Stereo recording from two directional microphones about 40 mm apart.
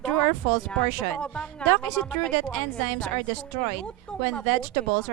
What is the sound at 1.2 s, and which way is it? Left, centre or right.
A woman's voice, left.